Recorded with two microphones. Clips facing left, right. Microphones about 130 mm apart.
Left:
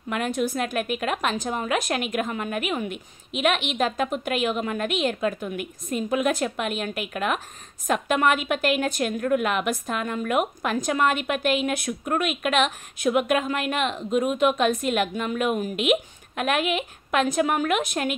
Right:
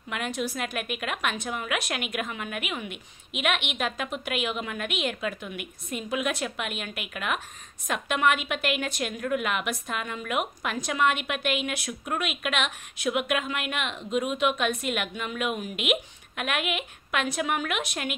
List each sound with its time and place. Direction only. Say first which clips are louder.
0.1 s a woman's voice: left 5 dB; 45° left (ahead or behind)